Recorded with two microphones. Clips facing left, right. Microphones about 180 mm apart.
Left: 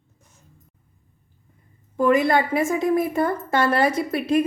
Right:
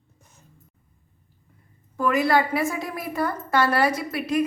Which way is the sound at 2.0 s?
25° left (ahead or behind).